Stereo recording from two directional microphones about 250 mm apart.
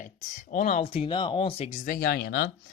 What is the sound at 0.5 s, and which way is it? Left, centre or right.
Speech, left.